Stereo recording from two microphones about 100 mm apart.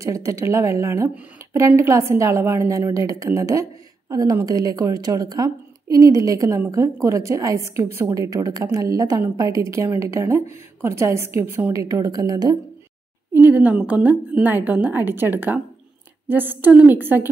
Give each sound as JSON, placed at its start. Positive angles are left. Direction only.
{"t": 0.0, "sound": "a woman's voice", "side_deg": -30}
{"t": 11.7, "sound": "a woman's voice", "side_deg": -35}
{"t": 13.3, "sound": "a woman's voice", "side_deg": -20}